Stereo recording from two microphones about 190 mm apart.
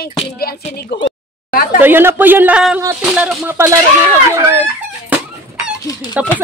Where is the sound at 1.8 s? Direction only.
10° right (ahead or behind).